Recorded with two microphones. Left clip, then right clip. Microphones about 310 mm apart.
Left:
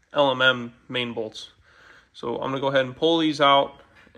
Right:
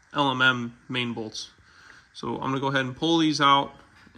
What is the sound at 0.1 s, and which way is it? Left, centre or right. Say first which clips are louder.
Speech: left 3 dB; centre.